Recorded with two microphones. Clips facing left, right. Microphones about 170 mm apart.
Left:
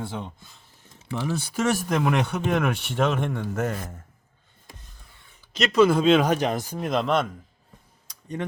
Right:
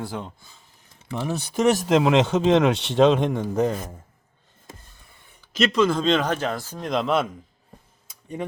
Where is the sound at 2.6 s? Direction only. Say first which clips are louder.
Right 6 dB; 80° right.